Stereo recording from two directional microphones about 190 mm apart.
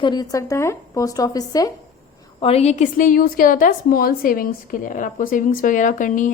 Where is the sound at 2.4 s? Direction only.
30° left (ahead or behind).